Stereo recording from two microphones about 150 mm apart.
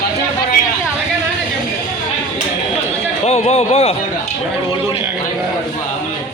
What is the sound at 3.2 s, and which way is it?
Speech, 45° left (ahead or behind).